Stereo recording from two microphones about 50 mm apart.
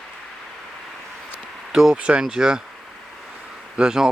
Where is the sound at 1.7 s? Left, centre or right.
Centre.